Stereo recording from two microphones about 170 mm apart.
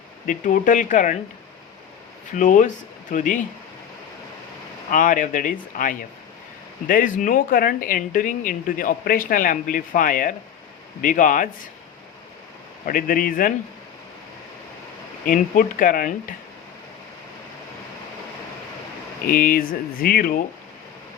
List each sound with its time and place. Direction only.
0.3 s speech: 50° left (ahead or behind)
2.3 s speech: 50° left (ahead or behind)
4.9 s speech: 50° left (ahead or behind)
12.8 s speech: 55° left (ahead or behind)
15.3 s speech: 55° left (ahead or behind)
19.3 s speech: 55° left (ahead or behind)